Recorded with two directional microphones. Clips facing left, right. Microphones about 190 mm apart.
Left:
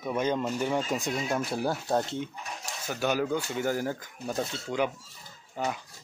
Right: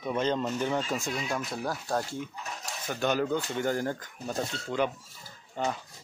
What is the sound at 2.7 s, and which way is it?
Speech, 10° left (ahead or behind).